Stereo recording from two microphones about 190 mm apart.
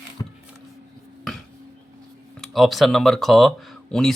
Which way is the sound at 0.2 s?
20° left (ahead or behind).